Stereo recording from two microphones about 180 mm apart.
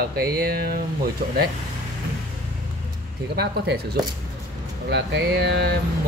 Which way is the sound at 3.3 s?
60° right (ahead or behind).